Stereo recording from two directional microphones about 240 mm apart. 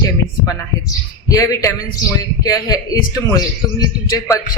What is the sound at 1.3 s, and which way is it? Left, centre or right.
A man's voice, centre.